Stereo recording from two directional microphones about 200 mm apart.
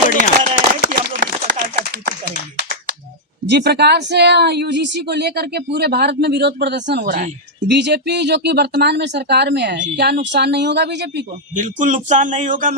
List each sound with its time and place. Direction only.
0.2 s a sound: 40° right (ahead or behind)
3.5 s speech: 55° right (ahead or behind)
7.7 s speech: 60° right (ahead or behind)
11.5 s speech: 40° right (ahead or behind)